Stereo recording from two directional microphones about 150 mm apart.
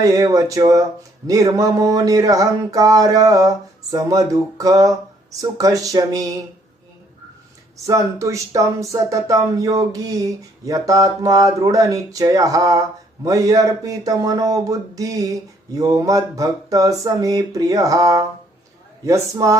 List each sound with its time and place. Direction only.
0.0 s speech: 25° right (ahead or behind)
7.9 s speech: 20° right (ahead or behind)